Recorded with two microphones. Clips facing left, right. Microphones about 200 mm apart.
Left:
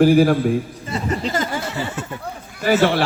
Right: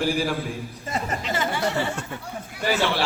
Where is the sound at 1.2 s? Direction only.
40° left (ahead or behind).